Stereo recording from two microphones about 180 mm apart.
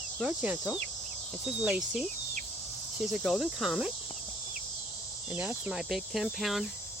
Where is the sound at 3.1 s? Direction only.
Centre (ahead or behind).